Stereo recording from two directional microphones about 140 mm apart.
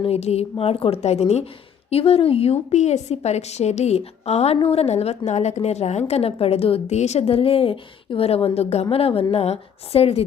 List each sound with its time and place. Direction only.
0.0 s a woman's voice: 50° left (ahead or behind)